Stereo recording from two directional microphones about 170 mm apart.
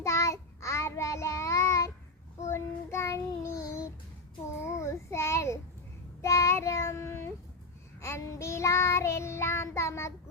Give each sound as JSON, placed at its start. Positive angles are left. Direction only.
{"t": 0.0, "sound": "child singing", "side_deg": 15}